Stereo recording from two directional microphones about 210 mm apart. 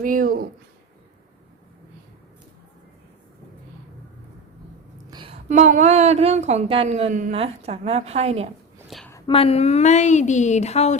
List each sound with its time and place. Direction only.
0.0 s a woman's voice: 40° right (ahead or behind)
5.1 s a woman's voice: 25° right (ahead or behind)
8.9 s a sound: centre (ahead or behind)
9.1 s a woman's voice: 25° left (ahead or behind)